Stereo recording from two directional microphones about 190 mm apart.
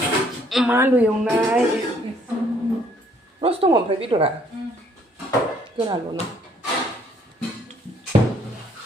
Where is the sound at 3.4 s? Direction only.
30° right (ahead or behind).